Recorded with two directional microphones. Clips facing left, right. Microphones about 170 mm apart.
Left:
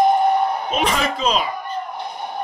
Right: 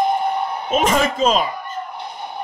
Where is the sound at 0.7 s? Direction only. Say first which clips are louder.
Right 3 dB; 45° right (ahead or behind).